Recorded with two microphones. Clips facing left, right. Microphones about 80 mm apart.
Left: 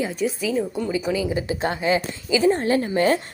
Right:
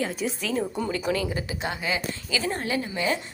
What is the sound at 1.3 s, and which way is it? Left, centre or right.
Speech, left.